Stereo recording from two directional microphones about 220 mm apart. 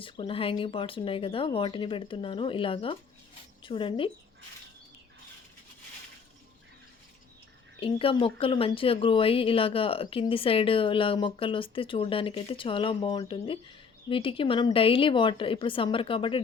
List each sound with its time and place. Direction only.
0.0 s speech: 25° left (ahead or behind)
7.8 s speech: 25° left (ahead or behind)